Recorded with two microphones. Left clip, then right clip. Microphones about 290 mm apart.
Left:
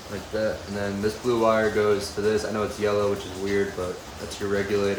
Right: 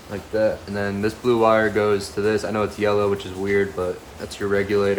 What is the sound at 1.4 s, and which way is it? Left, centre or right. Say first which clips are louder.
Speech: right 4 dB; centre.